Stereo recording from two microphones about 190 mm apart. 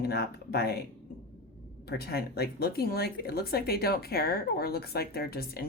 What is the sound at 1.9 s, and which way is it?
Speech, 55° left (ahead or behind).